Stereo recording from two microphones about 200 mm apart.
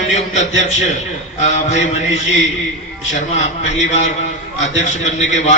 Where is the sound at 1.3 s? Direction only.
35° left (ahead or behind).